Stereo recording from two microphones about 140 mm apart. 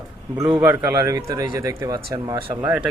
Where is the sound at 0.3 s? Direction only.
25° right (ahead or behind).